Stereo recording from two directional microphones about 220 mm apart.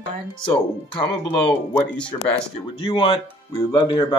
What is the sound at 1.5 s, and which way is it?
Speech, 5° left (ahead or behind).